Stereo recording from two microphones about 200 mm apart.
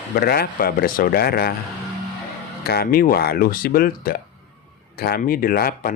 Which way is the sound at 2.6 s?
50° left (ahead or behind).